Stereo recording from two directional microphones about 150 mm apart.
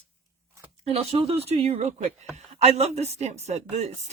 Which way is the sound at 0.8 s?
45° right (ahead or behind).